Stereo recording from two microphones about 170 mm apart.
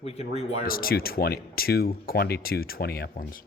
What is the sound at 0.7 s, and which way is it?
Speech, 60° left (ahead or behind).